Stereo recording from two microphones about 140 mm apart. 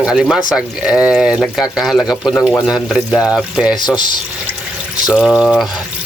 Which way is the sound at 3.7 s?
30° left (ahead or behind).